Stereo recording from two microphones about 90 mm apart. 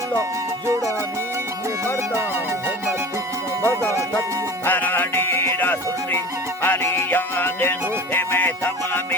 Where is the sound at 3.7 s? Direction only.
35° right (ahead or behind).